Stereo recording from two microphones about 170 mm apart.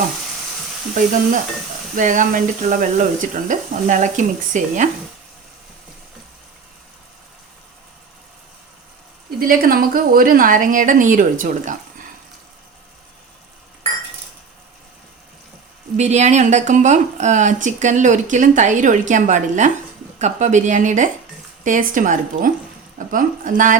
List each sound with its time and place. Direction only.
0.9 s speech: 50° right (ahead or behind)
9.4 s speech: 55° right (ahead or behind)
16.0 s speech: 40° right (ahead or behind)